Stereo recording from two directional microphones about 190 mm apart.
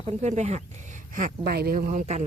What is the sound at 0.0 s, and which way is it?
Speech, 35° right (ahead or behind).